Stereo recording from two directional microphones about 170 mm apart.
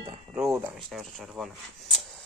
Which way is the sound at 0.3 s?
15° right (ahead or behind).